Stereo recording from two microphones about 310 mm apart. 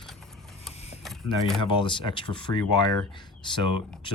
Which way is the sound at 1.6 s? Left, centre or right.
Centre.